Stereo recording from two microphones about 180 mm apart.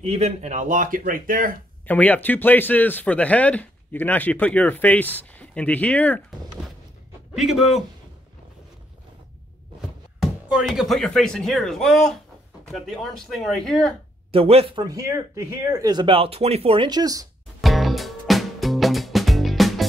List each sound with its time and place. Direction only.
0.0 s speech: 35° right (ahead or behind); by 1.6 s 50° right (ahead or behind)
1.9 s speech: 10° left (ahead or behind)
7.3 s speech: centre (ahead or behind)
9.8 s speech: centre (ahead or behind)
14.3 s speech: 30° right (ahead or behind)
17.6 s music: centre (ahead or behind)